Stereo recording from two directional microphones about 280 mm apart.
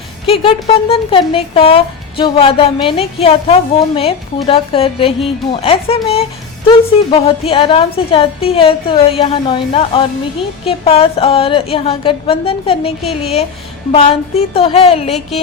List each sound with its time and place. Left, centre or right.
0.3 s speech: left